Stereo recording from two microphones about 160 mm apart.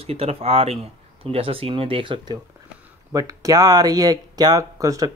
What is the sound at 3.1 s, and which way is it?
Speech, 20° right (ahead or behind).